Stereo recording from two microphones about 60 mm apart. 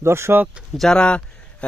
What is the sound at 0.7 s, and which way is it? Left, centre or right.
Speech, centre.